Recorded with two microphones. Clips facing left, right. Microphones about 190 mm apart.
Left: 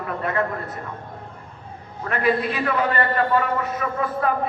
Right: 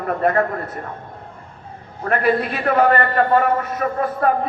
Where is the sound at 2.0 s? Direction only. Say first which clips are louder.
Right 3 dB; 50° right (ahead or behind).